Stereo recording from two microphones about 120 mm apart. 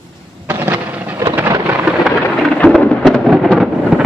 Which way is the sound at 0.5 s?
20° right (ahead or behind).